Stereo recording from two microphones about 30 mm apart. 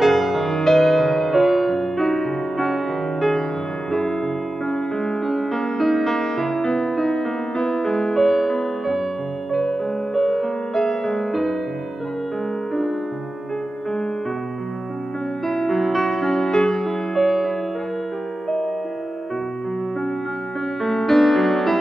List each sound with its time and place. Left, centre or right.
0.0 s music: centre
0.6 s music: centre
1.3 s music: centre
1.7 s music: centre
4.6 s music: centre
6.5 s music: centre
10.1 s music: centre
10.7 s music: centre
15.4 s music: centre
16.5 s music: centre
16.8 s music: centre
20.8 s music: centre